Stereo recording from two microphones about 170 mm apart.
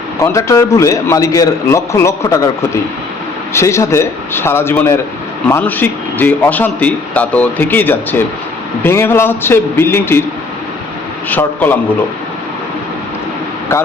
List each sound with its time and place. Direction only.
0.2 s a man's voice: 20° left (ahead or behind)
3.5 s a man's voice: 15° left (ahead or behind)
11.3 s a man's voice: 10° left (ahead or behind)